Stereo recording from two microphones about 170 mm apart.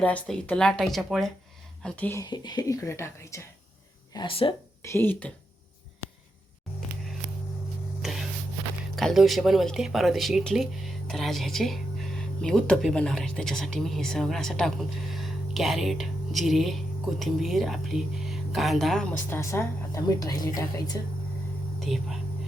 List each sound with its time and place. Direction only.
0.0 s speech: 10° left (ahead or behind)
2.2 s speech: 25° left (ahead or behind)
4.1 s speech: 30° left (ahead or behind)
4.8 s speech: 15° left (ahead or behind)
8.0 s a sound: centre (ahead or behind)
9.0 s speech: centre (ahead or behind); by 21.0 s 20° left (ahead or behind)
21.8 s speech: centre (ahead or behind)